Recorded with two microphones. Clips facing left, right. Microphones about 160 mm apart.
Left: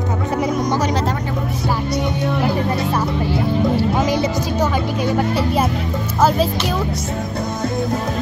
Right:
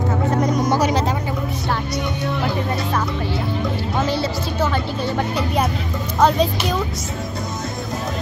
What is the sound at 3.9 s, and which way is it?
Speech, 15° left (ahead or behind).